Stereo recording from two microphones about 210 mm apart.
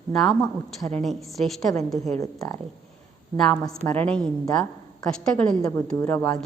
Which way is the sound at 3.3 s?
Centre (ahead or behind).